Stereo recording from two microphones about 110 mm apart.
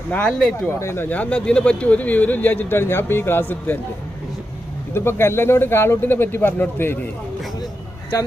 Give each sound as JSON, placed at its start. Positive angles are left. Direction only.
{"t": 0.1, "sound": "speech", "side_deg": 10}
{"t": 0.7, "sound": "speech", "side_deg": 25}
{"t": 1.1, "sound": "speech", "side_deg": 10}
{"t": 4.9, "sound": "speech", "side_deg": 20}